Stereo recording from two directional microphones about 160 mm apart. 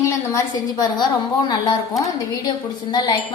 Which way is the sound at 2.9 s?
25° left (ahead or behind).